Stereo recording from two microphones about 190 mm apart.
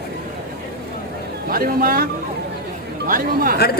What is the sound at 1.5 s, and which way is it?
A man's voice, 50° right (ahead or behind).